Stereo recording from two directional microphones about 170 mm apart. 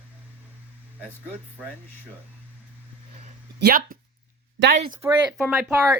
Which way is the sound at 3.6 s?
65° right (ahead or behind).